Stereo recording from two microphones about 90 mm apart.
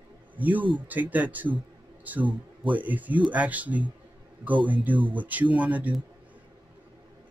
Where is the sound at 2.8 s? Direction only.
20° right (ahead or behind).